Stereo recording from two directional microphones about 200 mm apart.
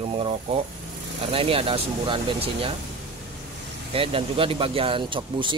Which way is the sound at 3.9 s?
25° right (ahead or behind).